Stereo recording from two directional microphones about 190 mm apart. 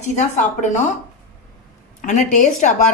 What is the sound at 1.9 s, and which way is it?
Speech, 40° left (ahead or behind).